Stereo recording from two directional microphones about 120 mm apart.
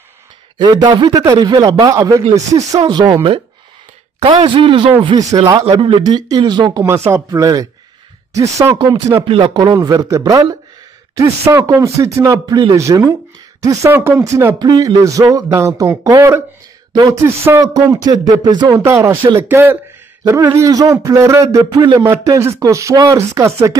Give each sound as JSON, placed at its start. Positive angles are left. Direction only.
{"t": 0.6, "sound": "a man's voice", "side_deg": -35}
{"t": 3.2, "sound": "a man's voice", "side_deg": -50}
{"t": 8.7, "sound": "a man's voice", "side_deg": -40}
{"t": 14.6, "sound": "speech", "side_deg": -35}
{"t": 16.9, "sound": "a sound", "side_deg": -35}
{"t": 17.2, "sound": "a man's voice", "side_deg": -25}
{"t": 18.9, "sound": "speech", "side_deg": -25}